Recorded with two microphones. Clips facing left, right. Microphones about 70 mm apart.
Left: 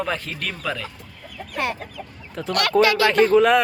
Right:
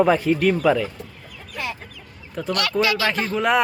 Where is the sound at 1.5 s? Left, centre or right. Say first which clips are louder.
Left 4 dB; left.